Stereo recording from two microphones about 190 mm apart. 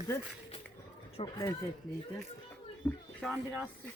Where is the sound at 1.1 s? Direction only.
20° left (ahead or behind).